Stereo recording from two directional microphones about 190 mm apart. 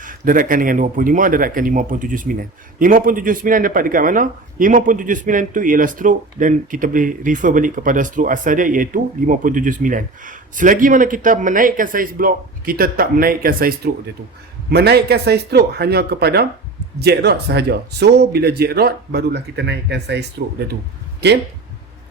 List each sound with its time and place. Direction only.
0.0 s speech: 45° right (ahead or behind)